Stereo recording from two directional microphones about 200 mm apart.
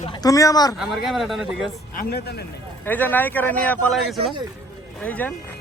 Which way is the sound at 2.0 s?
50° left (ahead or behind).